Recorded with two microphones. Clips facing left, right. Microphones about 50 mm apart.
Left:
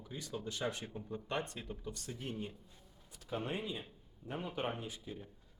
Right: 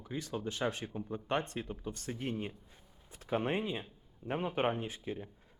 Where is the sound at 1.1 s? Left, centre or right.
Right.